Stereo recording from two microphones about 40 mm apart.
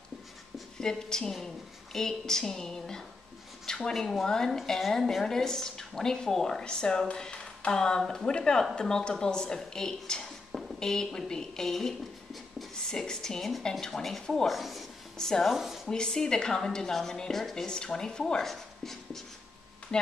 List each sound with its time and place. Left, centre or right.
0.7 s a woman's voice: centre
3.6 s a sound: centre
3.9 s a woman's voice: centre
15.1 s a woman's voice: centre
15.4 s speech: centre
15.9 s a woman's voice: centre
17.6 s a woman's voice: centre
19.9 s speech: left